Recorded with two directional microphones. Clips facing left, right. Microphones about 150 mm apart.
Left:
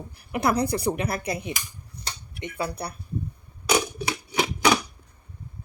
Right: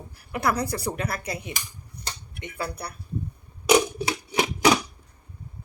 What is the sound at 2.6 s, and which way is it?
Speech, 20° left (ahead or behind).